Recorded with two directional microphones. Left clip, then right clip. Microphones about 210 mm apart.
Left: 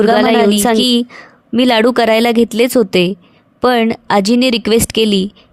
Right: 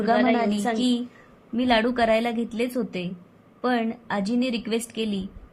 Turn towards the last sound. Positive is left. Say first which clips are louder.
# left 16 dB
turn(degrees=50)  # may be behind; listen again after turning